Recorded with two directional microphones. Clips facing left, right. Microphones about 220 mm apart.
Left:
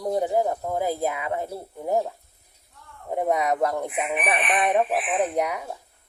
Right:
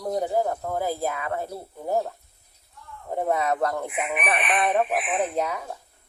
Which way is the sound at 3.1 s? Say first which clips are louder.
Left 1 dB; 15° left (ahead or behind).